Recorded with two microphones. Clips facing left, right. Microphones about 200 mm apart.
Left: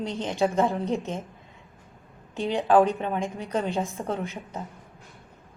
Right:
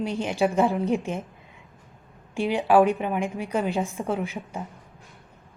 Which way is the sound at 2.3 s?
10° right (ahead or behind).